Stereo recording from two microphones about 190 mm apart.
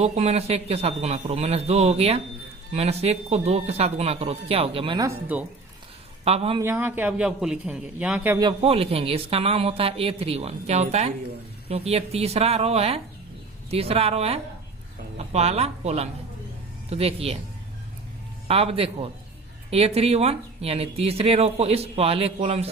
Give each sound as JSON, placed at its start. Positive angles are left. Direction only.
{"t": 0.0, "sound": "speech", "side_deg": -35}
{"t": 6.2, "sound": "speech", "side_deg": -30}
{"t": 6.6, "sound": "a man's voice", "side_deg": -10}
{"t": 8.4, "sound": "speech", "side_deg": -25}
{"t": 18.4, "sound": "speech", "side_deg": -30}